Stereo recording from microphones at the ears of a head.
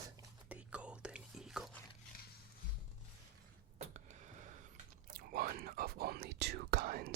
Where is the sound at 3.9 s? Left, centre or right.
Right.